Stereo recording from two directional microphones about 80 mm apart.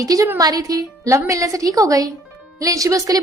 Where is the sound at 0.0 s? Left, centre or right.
Right.